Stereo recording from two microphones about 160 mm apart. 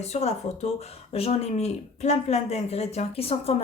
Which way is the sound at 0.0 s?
40° left (ahead or behind).